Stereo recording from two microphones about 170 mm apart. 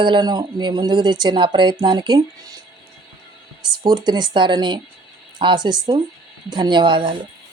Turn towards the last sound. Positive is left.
turn(degrees=-30)  # may be behind; listen again after turning